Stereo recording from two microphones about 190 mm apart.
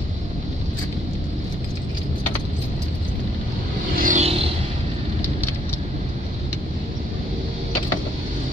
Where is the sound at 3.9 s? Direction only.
45° right (ahead or behind).